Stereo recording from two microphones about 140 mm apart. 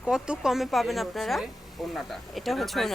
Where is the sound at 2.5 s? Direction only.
Centre (ahead or behind).